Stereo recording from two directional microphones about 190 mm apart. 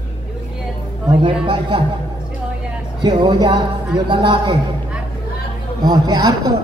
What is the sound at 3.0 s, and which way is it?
Speech, 25° right (ahead or behind).